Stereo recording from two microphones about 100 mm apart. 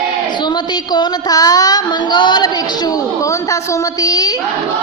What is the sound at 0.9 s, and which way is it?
Child singing, 40° left (ahead or behind).